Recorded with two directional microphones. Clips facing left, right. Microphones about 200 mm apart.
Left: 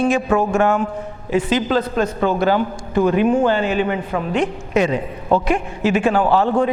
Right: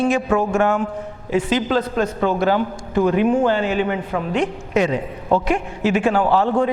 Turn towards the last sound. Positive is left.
turn(degrees=15)  # may be behind; listen again after turning